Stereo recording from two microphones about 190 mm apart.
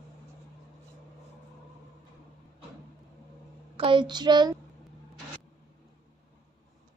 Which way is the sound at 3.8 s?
25° right (ahead or behind).